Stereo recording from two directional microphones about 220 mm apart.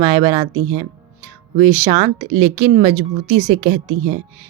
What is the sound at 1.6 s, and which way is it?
A woman's voice, 20° right (ahead or behind).